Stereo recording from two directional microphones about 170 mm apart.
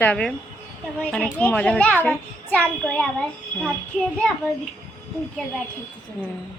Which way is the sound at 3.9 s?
Centre (ahead or behind).